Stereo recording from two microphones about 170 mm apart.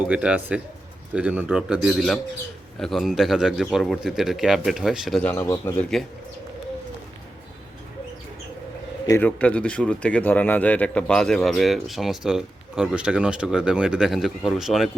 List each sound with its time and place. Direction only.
0.1 s speech: 5° right (ahead or behind)
5.5 s speech: 15° left (ahead or behind)
9.0 s speech: 10° left (ahead or behind)